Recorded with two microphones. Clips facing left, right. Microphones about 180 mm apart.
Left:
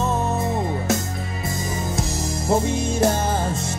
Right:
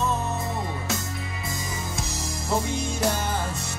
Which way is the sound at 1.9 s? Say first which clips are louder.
Left 7 dB; 50° left (ahead or behind).